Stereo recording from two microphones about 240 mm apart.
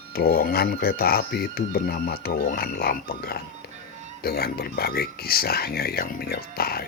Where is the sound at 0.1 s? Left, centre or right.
Left.